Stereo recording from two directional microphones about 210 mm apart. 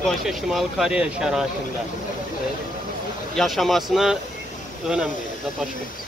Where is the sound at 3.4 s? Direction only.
Centre (ahead or behind).